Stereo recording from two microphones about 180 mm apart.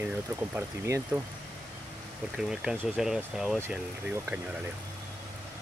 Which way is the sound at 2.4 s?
5° right (ahead or behind).